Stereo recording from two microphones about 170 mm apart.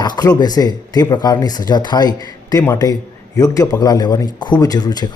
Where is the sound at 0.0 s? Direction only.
25° left (ahead or behind).